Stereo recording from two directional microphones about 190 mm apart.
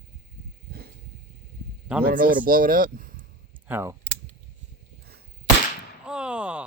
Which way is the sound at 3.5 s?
10° right (ahead or behind).